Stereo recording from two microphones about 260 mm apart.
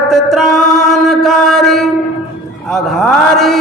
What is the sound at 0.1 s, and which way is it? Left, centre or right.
Mantra, centre.